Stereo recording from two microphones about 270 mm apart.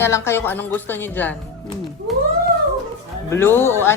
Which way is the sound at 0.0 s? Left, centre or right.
Centre.